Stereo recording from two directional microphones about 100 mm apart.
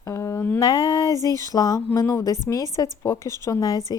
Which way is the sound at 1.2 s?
35° left (ahead or behind).